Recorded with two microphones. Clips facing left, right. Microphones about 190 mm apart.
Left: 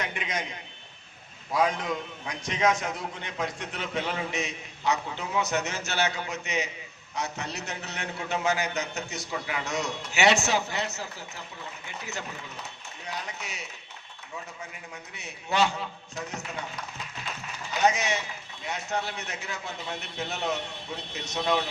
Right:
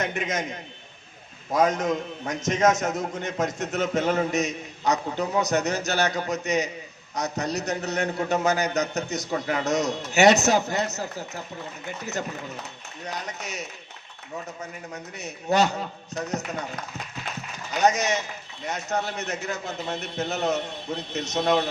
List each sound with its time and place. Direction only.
0.0 s a man's voice: 45° right (ahead or behind)
1.5 s a man's voice: 45° right (ahead or behind)
13.1 s a man's voice: 40° right (ahead or behind)
17.8 s a man's voice: 40° right (ahead or behind)